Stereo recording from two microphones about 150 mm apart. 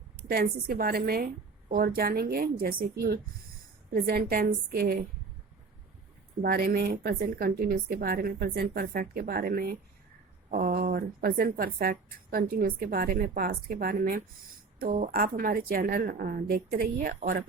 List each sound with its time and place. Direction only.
0.3 s a woman's voice: 85° right
1.7 s a woman's voice: 75° right (ahead or behind)
3.9 s a woman's voice: 90° right
6.4 s a woman's voice: 85° right
14.8 s a woman's voice: 65° right (ahead or behind)